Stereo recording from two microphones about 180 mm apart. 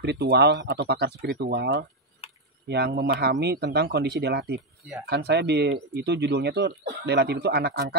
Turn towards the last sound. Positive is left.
turn(degrees=-60)  # may be behind; listen again after turning